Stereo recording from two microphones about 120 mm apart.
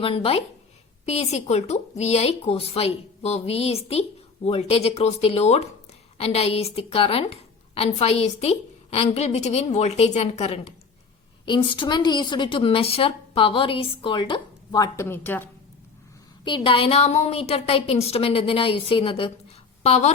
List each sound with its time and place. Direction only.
0.0 s a woman's voice: 50° left (ahead or behind)
1.0 s a woman's voice: 65° left (ahead or behind)
11.4 s a woman's voice: 40° left (ahead or behind)
14.8 s a woman's voice: 20° left (ahead or behind)
16.4 s a woman's voice: 40° left (ahead or behind)
19.8 s a woman's voice: 65° left (ahead or behind)